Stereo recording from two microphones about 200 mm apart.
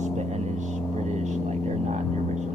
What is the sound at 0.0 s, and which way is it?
Vehicle, 35° right (ahead or behind).